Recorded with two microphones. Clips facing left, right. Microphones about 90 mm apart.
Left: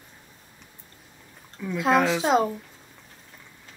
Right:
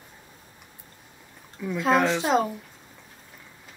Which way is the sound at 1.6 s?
Centre (ahead or behind).